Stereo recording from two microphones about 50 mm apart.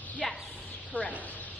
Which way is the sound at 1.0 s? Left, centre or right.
Left.